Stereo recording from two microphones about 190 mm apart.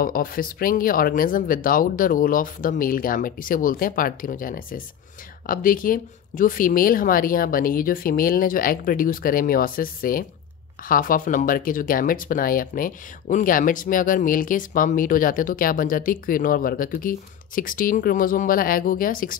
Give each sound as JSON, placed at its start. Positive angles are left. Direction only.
{"t": 0.0, "sound": "speech", "side_deg": 50}